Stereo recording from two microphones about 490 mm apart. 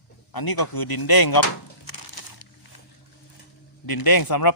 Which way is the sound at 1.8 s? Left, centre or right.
Left.